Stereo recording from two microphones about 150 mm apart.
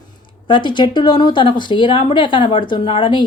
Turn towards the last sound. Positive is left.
turn(degrees=35)  # may be behind; listen again after turning